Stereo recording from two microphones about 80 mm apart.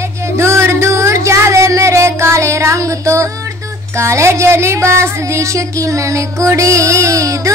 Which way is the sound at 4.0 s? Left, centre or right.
Right.